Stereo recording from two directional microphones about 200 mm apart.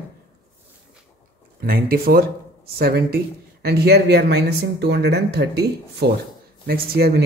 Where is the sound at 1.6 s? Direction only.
50° right (ahead or behind).